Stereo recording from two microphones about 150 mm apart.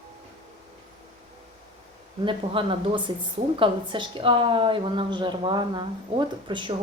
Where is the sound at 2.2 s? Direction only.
35° right (ahead or behind).